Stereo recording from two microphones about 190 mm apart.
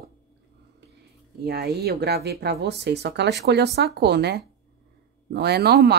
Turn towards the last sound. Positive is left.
turn(degrees=-60)  # may be behind; listen again after turning